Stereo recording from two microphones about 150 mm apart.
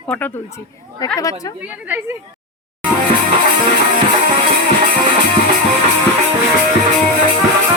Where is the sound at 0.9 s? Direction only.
25° left (ahead or behind).